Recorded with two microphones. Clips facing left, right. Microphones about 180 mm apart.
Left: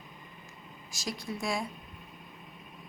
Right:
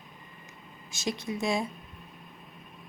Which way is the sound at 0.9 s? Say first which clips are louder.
Right 5 dB; 25° right (ahead or behind).